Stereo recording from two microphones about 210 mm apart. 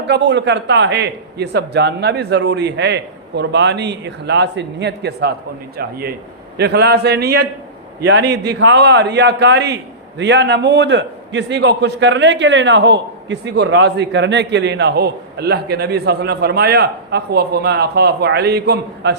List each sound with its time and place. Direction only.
0.1 s a man's voice: 55° right (ahead or behind)